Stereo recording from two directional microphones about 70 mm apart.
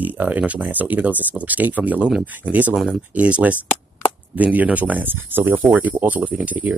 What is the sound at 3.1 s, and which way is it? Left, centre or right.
Speech, centre.